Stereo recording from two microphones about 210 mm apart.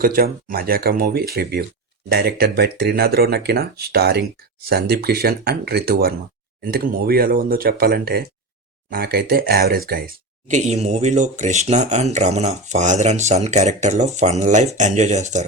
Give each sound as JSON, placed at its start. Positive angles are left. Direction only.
{"t": 0.0, "sound": "speech", "side_deg": -45}
{"t": 10.5, "sound": "speech", "side_deg": -35}